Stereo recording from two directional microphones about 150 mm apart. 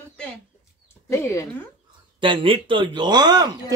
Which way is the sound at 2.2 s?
35° right (ahead or behind).